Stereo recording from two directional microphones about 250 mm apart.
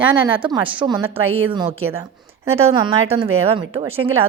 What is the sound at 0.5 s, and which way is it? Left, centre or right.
A woman's voice, centre.